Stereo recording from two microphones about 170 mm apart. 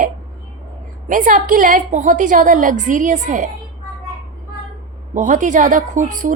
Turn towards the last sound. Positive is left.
turn(degrees=-50)  # may be behind; listen again after turning